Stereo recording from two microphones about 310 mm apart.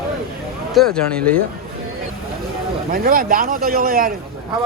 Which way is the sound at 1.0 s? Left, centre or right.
Centre.